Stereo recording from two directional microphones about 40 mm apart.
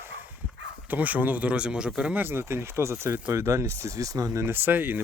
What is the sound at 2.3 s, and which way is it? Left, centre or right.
Speech, right.